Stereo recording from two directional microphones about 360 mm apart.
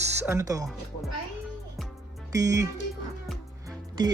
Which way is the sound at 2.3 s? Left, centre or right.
Centre.